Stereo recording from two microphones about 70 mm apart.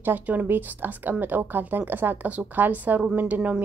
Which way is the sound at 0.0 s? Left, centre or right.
Right.